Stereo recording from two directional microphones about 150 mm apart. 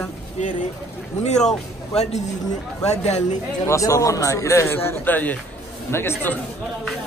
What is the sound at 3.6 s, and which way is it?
A man's voice, 20° left (ahead or behind).